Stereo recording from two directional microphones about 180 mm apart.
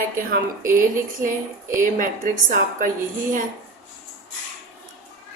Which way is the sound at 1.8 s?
50° right (ahead or behind).